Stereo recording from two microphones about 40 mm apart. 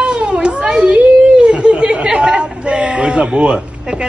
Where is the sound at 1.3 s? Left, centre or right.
Right.